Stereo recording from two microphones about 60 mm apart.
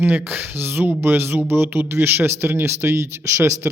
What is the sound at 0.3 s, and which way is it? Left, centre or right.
Speech, right.